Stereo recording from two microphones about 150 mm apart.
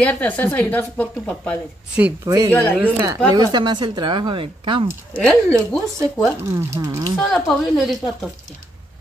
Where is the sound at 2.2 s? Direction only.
25° right (ahead or behind).